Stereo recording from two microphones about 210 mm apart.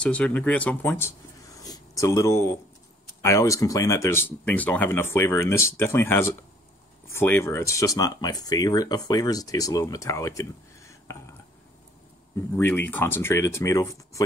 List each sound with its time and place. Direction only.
0.0 s speech: 5° left (ahead or behind)
12.4 s speech: 10° left (ahead or behind)